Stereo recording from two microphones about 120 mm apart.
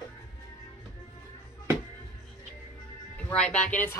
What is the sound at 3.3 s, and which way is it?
Speech, 5° left (ahead or behind).